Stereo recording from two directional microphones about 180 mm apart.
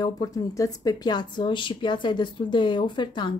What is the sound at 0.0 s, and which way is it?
A woman's voice, 20° left (ahead or behind).